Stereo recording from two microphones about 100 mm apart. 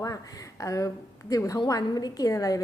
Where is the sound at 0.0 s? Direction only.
35° left (ahead or behind).